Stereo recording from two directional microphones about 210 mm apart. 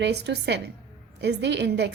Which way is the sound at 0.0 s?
55° right (ahead or behind).